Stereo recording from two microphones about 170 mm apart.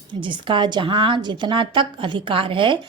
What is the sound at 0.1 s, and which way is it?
A woman's voice, 30° right (ahead or behind).